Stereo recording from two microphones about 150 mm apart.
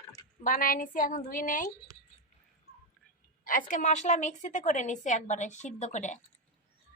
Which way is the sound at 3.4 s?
65° left (ahead or behind).